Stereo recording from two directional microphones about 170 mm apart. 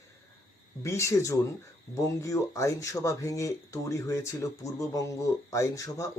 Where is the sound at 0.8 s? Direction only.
15° left (ahead or behind).